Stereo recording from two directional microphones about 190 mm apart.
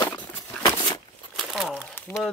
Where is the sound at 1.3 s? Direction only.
Centre (ahead or behind).